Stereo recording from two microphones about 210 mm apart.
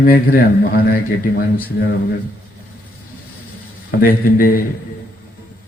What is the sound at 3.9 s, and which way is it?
Speech, 45° left (ahead or behind).